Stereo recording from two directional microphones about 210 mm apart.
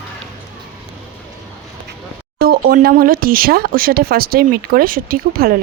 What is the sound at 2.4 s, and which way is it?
Speech, 45° right (ahead or behind).